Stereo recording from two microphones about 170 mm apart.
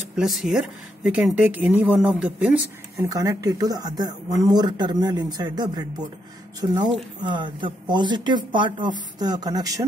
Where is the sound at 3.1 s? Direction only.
20° right (ahead or behind).